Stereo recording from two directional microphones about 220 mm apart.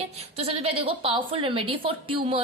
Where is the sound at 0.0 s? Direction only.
25° right (ahead or behind).